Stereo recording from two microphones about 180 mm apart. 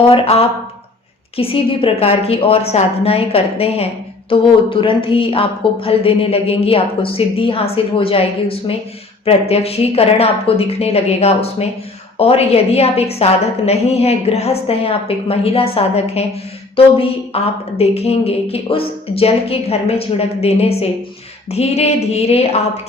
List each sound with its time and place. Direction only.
0.1 s speech: 30° left (ahead or behind)